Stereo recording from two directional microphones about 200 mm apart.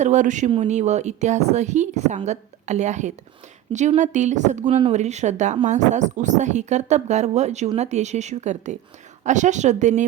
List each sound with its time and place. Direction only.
0.0 s a woman's voice: 35° right (ahead or behind)